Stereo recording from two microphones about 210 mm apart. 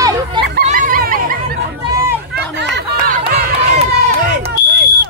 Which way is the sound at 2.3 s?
55° right (ahead or behind).